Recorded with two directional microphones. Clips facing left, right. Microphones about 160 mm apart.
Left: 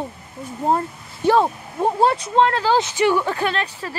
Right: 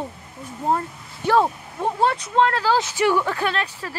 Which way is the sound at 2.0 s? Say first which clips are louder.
Left 2 dB; 35° left (ahead or behind).